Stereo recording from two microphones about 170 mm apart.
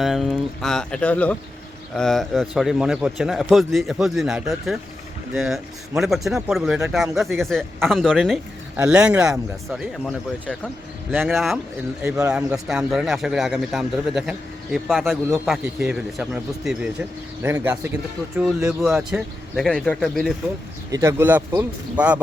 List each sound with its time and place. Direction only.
0.0 s a man's voice: centre (ahead or behind)
8.7 s a man's voice: 5° right (ahead or behind)
12.0 s a man's voice: 15° right (ahead or behind); by 20.3 s 5° left (ahead or behind)
20.9 s a man's voice: 15° right (ahead or behind)